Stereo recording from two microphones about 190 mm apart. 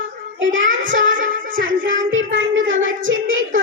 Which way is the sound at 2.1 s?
90° right.